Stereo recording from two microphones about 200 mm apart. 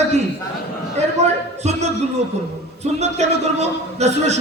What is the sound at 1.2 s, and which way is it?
Speech, 35° right (ahead or behind).